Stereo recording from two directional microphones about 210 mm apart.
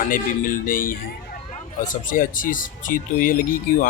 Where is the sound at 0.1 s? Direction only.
40° left (ahead or behind).